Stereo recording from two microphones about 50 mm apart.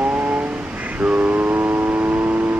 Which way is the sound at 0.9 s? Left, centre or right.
Right.